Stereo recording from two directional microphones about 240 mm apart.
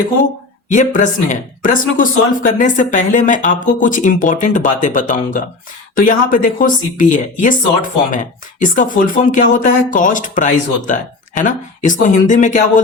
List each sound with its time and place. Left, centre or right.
0.7 s speech: left